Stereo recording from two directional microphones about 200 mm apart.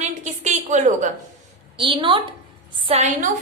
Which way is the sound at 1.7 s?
25° right (ahead or behind).